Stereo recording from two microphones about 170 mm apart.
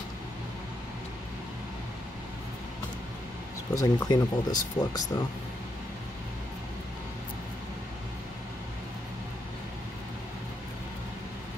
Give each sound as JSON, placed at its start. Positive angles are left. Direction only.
{"t": 3.7, "sound": "speech", "side_deg": 25}